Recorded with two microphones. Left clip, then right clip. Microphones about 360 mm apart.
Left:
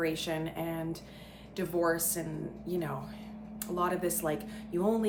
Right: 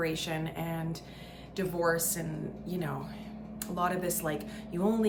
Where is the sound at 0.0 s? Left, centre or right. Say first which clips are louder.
Even; centre.